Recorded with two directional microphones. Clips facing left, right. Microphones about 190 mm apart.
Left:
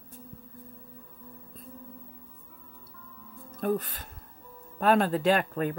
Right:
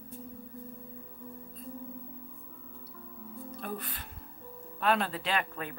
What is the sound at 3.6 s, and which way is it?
Speech, 40° left (ahead or behind).